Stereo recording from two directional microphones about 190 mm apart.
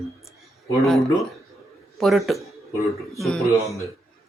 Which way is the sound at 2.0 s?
Centre (ahead or behind).